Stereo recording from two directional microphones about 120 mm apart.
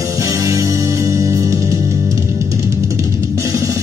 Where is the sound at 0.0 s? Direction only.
30° right (ahead or behind).